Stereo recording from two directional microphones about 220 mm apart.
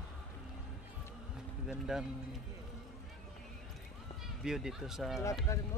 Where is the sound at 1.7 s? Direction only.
Centre (ahead or behind).